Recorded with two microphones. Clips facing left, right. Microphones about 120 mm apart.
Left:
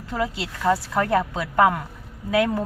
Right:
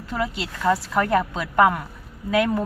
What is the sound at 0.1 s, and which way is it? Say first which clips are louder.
Speech: even; 25° left (ahead or behind).